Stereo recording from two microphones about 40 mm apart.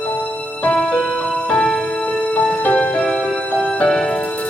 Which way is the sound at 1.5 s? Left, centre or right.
Left.